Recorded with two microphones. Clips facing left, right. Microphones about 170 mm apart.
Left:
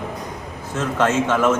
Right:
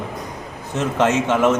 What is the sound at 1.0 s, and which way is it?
Speech, 15° right (ahead or behind).